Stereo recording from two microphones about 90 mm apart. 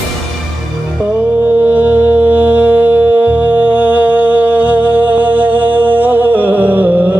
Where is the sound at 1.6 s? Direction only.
20° right (ahead or behind).